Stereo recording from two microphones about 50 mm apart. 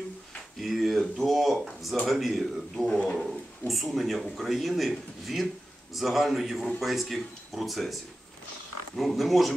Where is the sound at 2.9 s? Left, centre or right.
Left.